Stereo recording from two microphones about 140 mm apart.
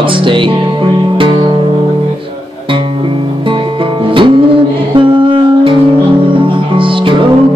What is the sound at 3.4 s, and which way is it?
Music, 35° right (ahead or behind).